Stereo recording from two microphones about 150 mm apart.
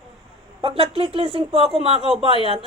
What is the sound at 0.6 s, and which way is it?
Speech, 40° right (ahead or behind).